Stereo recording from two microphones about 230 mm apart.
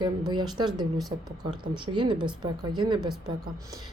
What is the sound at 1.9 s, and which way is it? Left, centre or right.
A woman's voice, right.